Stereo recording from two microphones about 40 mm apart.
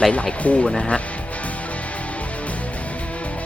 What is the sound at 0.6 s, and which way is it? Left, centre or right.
Speech, centre.